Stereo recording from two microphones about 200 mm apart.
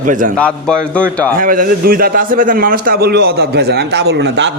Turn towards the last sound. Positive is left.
turn(degrees=-60)  # may be behind; listen again after turning